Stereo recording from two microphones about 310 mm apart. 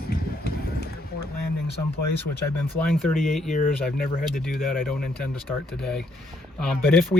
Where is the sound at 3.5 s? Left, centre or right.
Left.